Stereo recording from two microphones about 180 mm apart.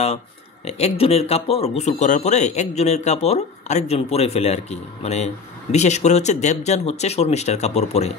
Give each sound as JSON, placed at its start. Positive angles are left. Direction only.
{"t": 0.7, "sound": "speech", "side_deg": 35}